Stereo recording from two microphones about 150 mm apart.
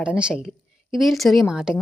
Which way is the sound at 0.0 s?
5° right (ahead or behind).